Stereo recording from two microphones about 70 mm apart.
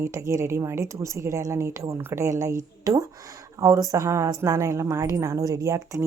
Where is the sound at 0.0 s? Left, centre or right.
Right.